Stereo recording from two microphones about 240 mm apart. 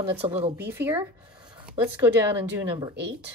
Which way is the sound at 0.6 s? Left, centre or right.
Centre.